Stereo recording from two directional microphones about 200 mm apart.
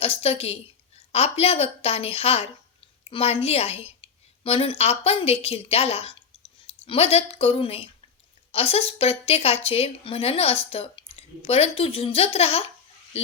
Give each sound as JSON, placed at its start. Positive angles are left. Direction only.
{"t": 0.0, "sound": "a woman's voice", "side_deg": 30}